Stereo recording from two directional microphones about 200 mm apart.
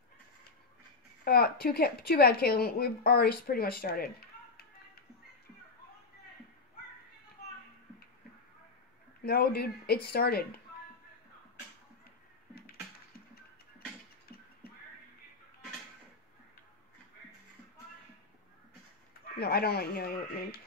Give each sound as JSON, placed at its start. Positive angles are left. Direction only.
{"t": 1.2, "sound": "a woman's voice", "side_deg": 50}
{"t": 9.2, "sound": "a woman's voice", "side_deg": 50}
{"t": 19.3, "sound": "a woman's voice", "side_deg": 50}